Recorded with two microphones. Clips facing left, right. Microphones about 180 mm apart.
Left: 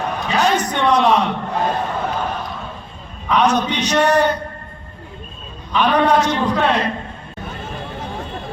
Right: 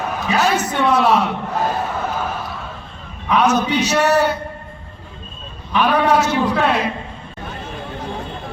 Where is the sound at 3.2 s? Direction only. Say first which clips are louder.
Even; 5° right (ahead or behind).